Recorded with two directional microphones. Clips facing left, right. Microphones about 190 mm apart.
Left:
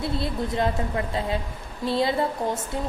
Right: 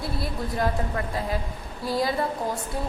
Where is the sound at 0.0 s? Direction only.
25° left (ahead or behind).